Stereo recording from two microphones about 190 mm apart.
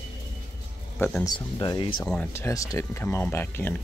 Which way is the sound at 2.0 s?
10° left (ahead or behind).